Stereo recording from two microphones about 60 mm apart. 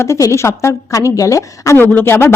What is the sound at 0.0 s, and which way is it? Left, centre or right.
Speech, left.